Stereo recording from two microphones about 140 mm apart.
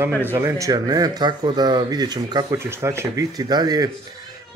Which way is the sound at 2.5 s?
20° right (ahead or behind).